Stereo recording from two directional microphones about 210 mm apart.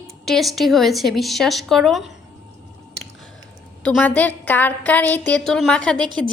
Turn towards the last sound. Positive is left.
turn(degrees=5)  # may be behind; listen again after turning